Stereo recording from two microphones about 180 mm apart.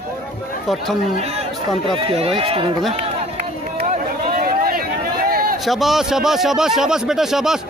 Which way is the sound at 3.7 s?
50° right (ahead or behind).